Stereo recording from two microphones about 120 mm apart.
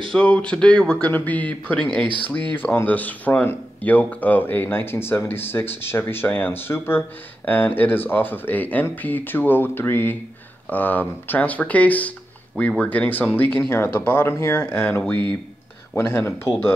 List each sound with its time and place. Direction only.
0.1 s speech: 10° left (ahead or behind)